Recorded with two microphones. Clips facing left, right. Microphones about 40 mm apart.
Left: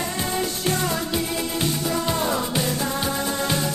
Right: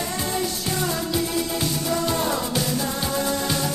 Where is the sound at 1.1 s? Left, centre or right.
Left.